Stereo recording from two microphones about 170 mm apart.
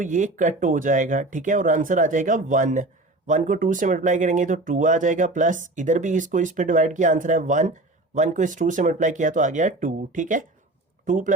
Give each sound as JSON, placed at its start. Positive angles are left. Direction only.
{"t": 0.0, "sound": "speech", "side_deg": -45}